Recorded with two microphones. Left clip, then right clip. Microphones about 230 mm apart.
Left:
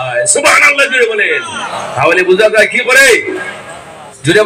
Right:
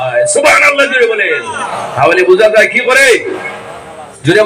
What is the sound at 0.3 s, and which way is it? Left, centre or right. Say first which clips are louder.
A man's voice: even; left.